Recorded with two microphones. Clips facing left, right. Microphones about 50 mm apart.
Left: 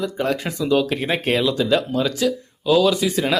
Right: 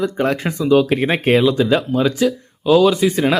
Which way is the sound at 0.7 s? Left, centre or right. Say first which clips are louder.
Right 5 dB; centre.